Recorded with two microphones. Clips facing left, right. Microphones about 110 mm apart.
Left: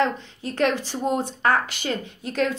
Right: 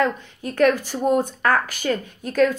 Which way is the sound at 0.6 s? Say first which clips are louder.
Right 5 dB; 45° right (ahead or behind).